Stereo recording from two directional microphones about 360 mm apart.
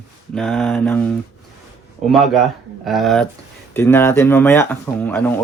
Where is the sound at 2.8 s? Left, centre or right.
Centre.